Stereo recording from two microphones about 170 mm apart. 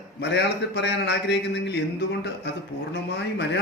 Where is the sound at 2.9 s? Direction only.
90° left.